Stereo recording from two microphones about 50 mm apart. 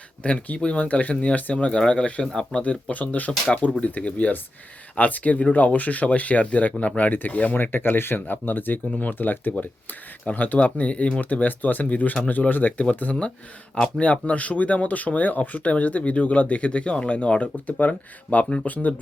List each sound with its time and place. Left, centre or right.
0.2 s speech: left
2.2 s speech: centre
2.6 s speech: left